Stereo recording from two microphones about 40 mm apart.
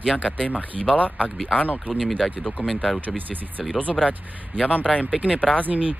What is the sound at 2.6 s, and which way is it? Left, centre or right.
Speech, right.